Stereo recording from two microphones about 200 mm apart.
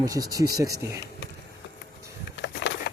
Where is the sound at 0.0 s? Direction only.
15° right (ahead or behind).